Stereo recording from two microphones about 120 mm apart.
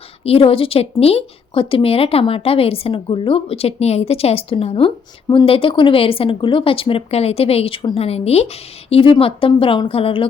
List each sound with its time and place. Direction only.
0.3 s speech: 55° left (ahead or behind)
8.9 s speech: 50° left (ahead or behind)